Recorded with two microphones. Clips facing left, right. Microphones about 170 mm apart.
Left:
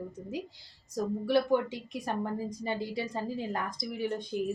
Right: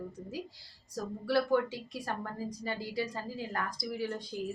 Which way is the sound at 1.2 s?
20° left (ahead or behind).